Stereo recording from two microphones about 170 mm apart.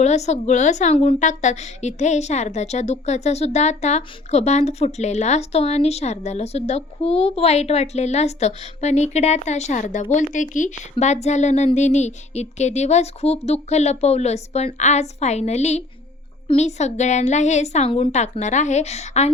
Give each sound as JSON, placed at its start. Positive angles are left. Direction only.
{"t": 0.0, "sound": "a woman's voice", "side_deg": 40}